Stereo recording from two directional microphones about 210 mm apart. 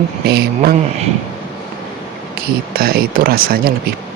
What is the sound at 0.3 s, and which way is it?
Speech, 50° right (ahead or behind).